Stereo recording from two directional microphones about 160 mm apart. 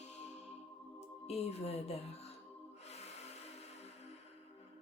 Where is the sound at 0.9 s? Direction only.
40° left (ahead or behind).